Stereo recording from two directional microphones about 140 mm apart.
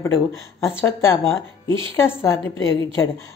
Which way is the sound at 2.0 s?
20° left (ahead or behind).